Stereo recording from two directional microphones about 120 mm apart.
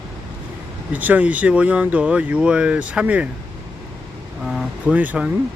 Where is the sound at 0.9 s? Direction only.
15° right (ahead or behind).